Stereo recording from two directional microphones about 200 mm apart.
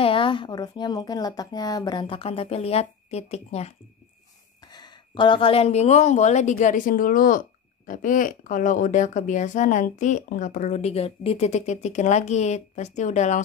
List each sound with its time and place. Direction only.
0.0 s speech: 25° left (ahead or behind)
4.7 s a woman's voice: 20° left (ahead or behind)